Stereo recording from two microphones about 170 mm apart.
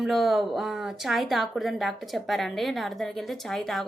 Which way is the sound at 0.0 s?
Centre (ahead or behind).